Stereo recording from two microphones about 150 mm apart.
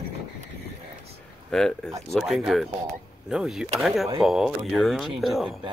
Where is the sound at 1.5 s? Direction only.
5° left (ahead or behind).